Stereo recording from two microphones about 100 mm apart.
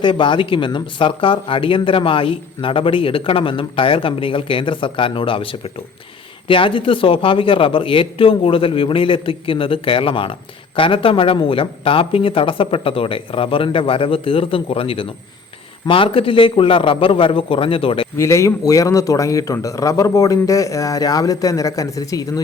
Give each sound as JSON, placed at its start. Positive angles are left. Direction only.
{"t": 0.0, "sound": "speech", "side_deg": 55}
{"t": 18.2, "sound": "a man's voice", "side_deg": 30}